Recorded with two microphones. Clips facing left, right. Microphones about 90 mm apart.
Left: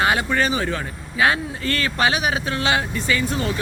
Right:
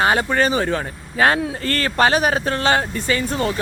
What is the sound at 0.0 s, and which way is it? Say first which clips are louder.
Speech: right 2 dB; 35° right (ahead or behind).